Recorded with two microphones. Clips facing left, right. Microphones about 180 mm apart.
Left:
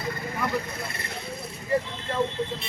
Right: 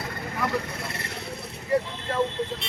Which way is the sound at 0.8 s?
75° right (ahead or behind).